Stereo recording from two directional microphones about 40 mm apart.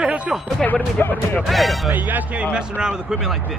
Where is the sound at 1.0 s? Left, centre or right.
Left.